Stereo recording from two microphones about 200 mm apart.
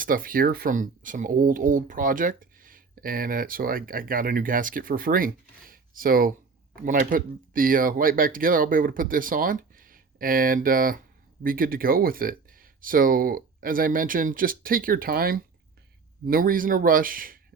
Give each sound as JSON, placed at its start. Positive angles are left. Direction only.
{"t": 0.0, "sound": "speech", "side_deg": -45}